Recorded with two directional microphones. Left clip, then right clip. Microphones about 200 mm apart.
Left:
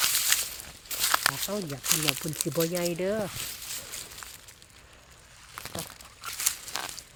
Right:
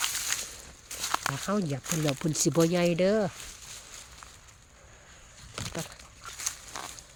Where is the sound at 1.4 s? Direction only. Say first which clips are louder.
Right 2 dB; 55° right (ahead or behind).